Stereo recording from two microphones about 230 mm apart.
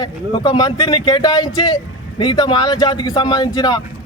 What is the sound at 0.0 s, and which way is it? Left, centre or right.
Speech, centre.